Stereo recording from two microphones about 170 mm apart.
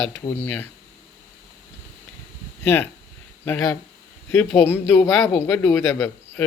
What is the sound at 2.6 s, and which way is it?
Speech, 10° left (ahead or behind).